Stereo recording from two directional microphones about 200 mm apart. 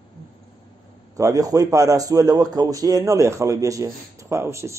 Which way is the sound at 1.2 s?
15° right (ahead or behind).